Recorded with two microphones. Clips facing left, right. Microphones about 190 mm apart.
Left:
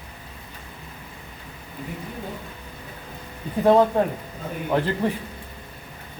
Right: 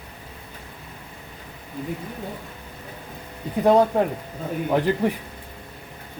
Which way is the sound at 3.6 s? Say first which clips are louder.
Even; 15° right (ahead or behind).